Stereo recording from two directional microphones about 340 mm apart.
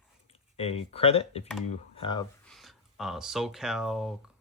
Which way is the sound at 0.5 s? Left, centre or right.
Centre.